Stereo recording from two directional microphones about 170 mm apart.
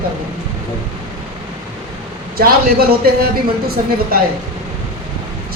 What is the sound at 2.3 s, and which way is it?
Speech, 65° right (ahead or behind).